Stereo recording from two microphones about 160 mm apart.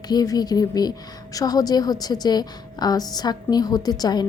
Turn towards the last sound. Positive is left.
turn(degrees=25)  # may be behind; listen again after turning